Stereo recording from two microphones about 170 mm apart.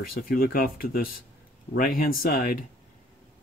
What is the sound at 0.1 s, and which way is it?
Speech, 60° left (ahead or behind).